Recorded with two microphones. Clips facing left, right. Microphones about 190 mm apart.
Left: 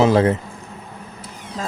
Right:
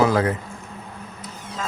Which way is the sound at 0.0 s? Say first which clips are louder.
Left 4 dB; 25° left (ahead or behind).